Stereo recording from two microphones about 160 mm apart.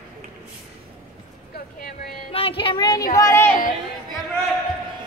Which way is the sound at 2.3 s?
35° left (ahead or behind).